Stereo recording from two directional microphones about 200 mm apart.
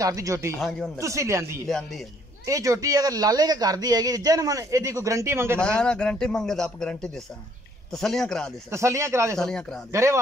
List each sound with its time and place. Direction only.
0.0 s a man's voice: 15° right (ahead or behind)
0.6 s a man's voice: centre (ahead or behind)
0.9 s a man's voice: 15° right (ahead or behind)
1.7 s a man's voice: centre (ahead or behind)
2.4 s a man's voice: 15° right (ahead or behind)
5.6 s a man's voice: 5° left (ahead or behind)
8.6 s a man's voice: 15° right (ahead or behind)
9.4 s a man's voice: 5° left (ahead or behind)